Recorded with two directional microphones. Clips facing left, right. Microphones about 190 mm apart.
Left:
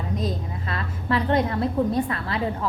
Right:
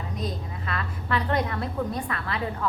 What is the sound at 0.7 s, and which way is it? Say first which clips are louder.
A woman's voice: left 3 dB; 30° left (ahead or behind).